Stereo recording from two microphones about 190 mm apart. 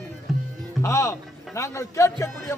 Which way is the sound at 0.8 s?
15° left (ahead or behind).